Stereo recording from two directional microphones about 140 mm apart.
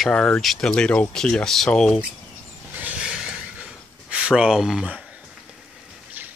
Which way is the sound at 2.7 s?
10° right (ahead or behind).